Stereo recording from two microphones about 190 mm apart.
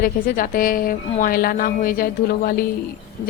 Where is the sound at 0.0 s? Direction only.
45° left (ahead or behind).